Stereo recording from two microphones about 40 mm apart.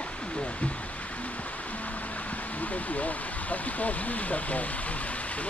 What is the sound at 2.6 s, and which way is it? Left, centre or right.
Speech, left.